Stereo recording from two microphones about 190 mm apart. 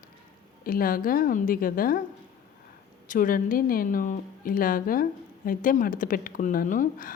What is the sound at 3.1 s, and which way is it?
A woman's voice, 45° left (ahead or behind).